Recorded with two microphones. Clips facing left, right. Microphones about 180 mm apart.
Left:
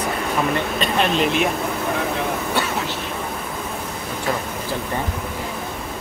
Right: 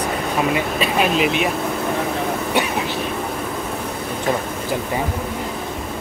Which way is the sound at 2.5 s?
15° right (ahead or behind).